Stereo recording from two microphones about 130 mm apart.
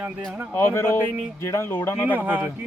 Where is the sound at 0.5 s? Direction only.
20° left (ahead or behind).